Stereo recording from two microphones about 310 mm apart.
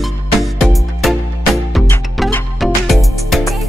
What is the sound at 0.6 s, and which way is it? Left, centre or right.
Music, centre.